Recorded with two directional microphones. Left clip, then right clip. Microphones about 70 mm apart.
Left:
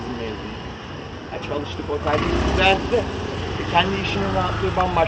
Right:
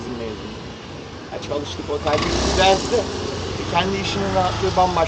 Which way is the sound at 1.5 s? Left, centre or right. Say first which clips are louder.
Right 2 dB; right.